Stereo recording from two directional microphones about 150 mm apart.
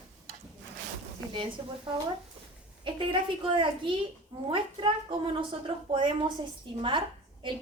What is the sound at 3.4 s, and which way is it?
A woman's voice, 35° right (ahead or behind).